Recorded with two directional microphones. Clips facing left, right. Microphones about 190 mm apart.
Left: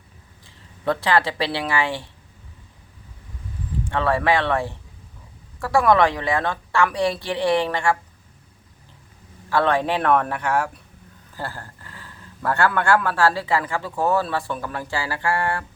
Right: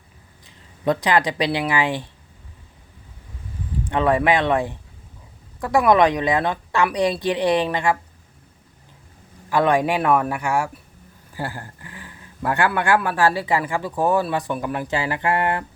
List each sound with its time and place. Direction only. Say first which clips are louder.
0.4 s speech: right 2 dB; 15° right (ahead or behind)
3.8 s a woman's voice: right 2 dB; 15° right (ahead or behind)
9.5 s speech: right 2 dB; 15° right (ahead or behind)